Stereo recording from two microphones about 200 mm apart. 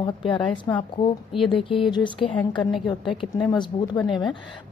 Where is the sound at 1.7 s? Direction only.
25° left (ahead or behind).